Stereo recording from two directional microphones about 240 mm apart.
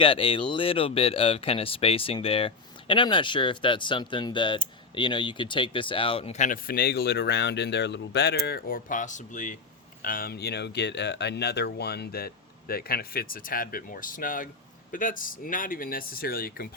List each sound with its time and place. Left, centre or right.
0.0 s speech: left